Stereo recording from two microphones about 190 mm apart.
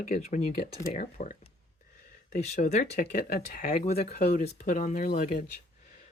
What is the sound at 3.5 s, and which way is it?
Speech, 50° left (ahead or behind).